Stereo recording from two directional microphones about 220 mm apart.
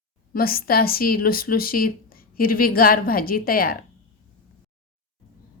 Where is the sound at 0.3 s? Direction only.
40° left (ahead or behind).